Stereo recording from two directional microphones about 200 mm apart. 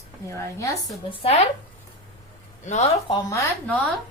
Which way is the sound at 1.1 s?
30° left (ahead or behind).